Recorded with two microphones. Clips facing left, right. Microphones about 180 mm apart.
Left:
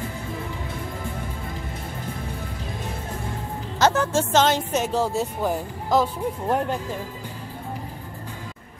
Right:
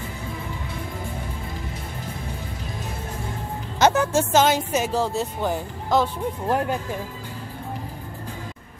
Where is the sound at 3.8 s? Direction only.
15° right (ahead or behind).